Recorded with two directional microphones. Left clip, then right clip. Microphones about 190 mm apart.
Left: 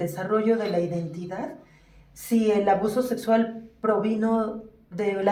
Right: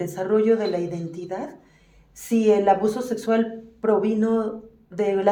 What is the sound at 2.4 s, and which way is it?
A woman's voice, 45° right (ahead or behind).